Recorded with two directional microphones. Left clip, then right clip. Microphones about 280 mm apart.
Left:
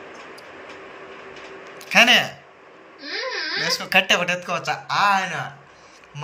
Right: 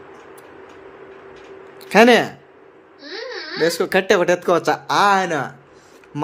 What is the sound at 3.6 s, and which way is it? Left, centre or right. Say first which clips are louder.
A man's voice: right 2 dB; right.